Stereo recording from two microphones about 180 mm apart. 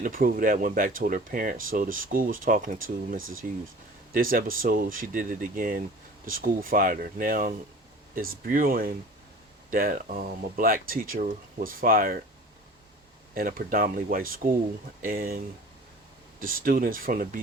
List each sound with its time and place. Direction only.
0.0 s speech: 50° right (ahead or behind)
3.2 s speech: 90° right
4.1 s speech: 50° right (ahead or behind)
13.3 s speech: 55° right (ahead or behind)
16.4 s speech: 50° right (ahead or behind)